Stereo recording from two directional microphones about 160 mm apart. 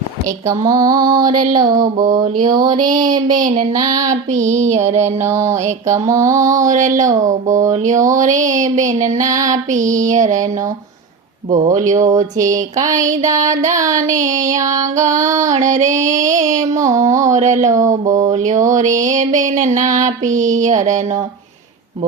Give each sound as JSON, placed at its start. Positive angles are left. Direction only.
{"t": 0.4, "sound": "speech", "side_deg": -20}
{"t": 3.3, "sound": "a sound", "side_deg": -55}
{"t": 3.8, "sound": "speech", "side_deg": -20}
{"t": 4.1, "sound": "music", "side_deg": -50}
{"t": 5.2, "sound": "music", "side_deg": -15}
{"t": 6.1, "sound": "speech", "side_deg": -20}
{"t": 6.5, "sound": "music", "side_deg": -50}
{"t": 9.1, "sound": "speech", "side_deg": -20}
{"t": 9.5, "sound": "music", "side_deg": -50}
{"t": 11.5, "sound": "music", "side_deg": -45}
{"t": 13.2, "sound": "speech", "side_deg": -20}
{"t": 15.4, "sound": "music", "side_deg": -50}
{"t": 16.4, "sound": "speech", "side_deg": -20}
{"t": 17.3, "sound": "music", "side_deg": -50}